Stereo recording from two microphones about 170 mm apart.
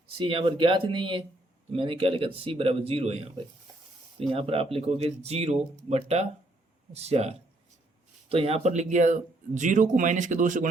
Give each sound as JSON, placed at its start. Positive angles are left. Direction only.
{"t": 0.2, "sound": "speech", "side_deg": -35}
{"t": 4.3, "sound": "speech", "side_deg": -35}